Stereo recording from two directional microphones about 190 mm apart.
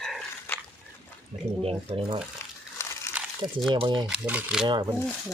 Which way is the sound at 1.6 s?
30° right (ahead or behind).